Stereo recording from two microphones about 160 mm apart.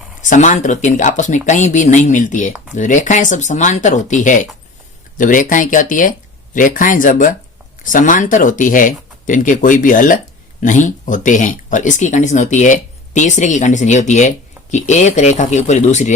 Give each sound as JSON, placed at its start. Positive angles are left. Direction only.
{"t": 0.2, "sound": "speech", "side_deg": 50}